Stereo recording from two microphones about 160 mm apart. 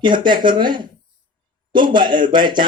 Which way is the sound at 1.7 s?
30° right (ahead or behind).